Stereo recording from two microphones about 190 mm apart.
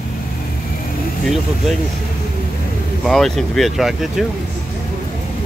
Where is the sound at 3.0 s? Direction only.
Centre (ahead or behind).